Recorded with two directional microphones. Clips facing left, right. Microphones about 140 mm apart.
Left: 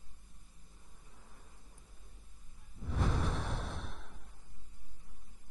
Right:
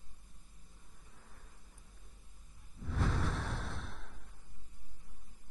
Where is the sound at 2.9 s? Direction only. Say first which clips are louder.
Left 1 dB; 15° left (ahead or behind).